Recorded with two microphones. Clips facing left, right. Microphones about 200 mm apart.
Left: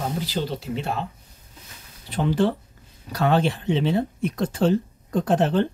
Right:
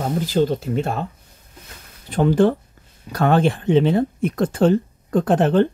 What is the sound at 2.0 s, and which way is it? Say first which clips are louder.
Speech: right 6 dB; 50° right (ahead or behind).